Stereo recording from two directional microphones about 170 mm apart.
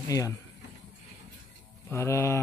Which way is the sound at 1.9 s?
15° left (ahead or behind).